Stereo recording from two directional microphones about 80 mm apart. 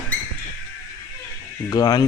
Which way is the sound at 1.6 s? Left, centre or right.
Left.